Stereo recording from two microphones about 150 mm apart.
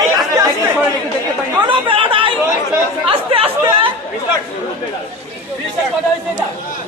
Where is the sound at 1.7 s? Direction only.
35° right (ahead or behind).